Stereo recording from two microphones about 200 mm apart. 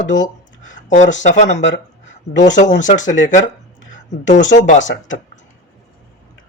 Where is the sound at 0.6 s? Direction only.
40° left (ahead or behind).